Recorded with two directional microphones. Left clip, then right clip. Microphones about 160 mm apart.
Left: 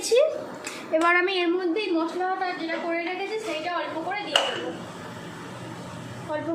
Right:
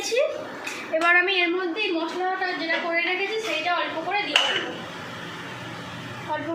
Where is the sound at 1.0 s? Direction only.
70° left (ahead or behind).